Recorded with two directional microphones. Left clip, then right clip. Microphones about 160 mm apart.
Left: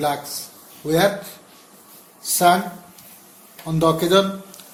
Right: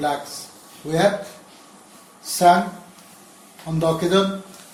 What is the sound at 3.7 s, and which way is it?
Speech, 60° left (ahead or behind).